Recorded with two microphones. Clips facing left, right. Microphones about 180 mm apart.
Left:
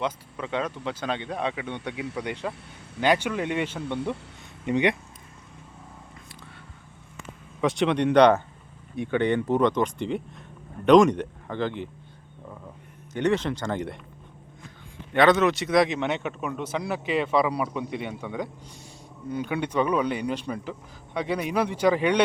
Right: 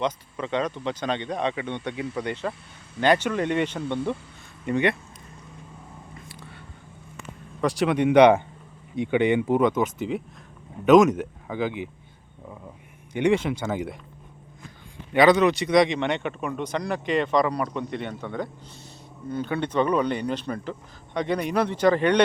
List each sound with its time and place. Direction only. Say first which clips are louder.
0.0 s speech: right 2 dB; 5° left (ahead or behind)
7.6 s speech: right 1 dB; centre (ahead or behind)
13.1 s speech: right 2 dB; 10° right (ahead or behind)
15.1 s speech: right 2 dB; 5° right (ahead or behind)